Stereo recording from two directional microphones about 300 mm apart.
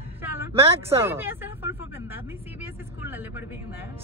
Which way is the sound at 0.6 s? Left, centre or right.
Centre.